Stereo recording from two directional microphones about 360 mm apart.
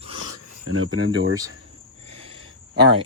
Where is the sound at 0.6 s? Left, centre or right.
Right.